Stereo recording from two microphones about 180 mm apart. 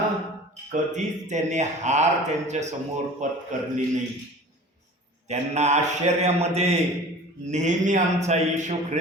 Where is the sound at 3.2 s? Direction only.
45° right (ahead or behind).